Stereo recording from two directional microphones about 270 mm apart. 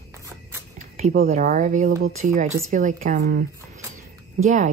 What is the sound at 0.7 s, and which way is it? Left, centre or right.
Speech, right.